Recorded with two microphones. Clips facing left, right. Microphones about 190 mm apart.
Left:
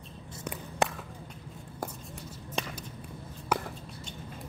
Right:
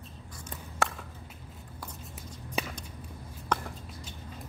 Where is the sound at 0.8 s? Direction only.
20° left (ahead or behind).